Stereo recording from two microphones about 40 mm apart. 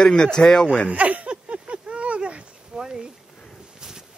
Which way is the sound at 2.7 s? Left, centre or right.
Centre.